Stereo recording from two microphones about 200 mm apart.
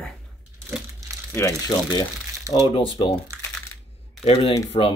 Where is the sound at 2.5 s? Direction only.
15° right (ahead or behind).